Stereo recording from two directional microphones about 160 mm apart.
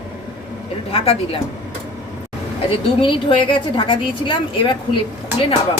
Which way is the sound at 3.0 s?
30° left (ahead or behind).